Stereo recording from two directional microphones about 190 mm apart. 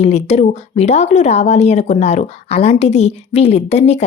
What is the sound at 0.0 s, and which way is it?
A woman's voice, 35° left (ahead or behind).